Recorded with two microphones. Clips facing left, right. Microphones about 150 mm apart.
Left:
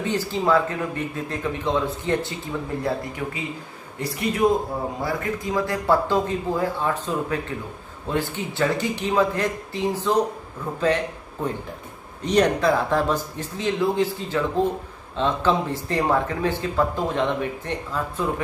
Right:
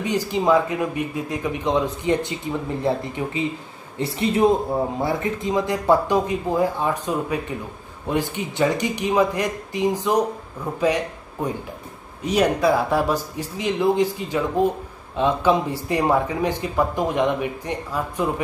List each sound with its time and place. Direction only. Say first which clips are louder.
0.0 s speech: right 2 dB; 15° right (ahead or behind)
12.2 s speech: even; 10° right (ahead or behind)